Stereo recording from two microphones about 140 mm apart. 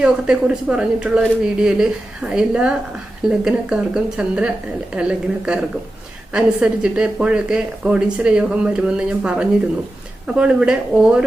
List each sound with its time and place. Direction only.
0.0 s a woman's voice: 5° right (ahead or behind)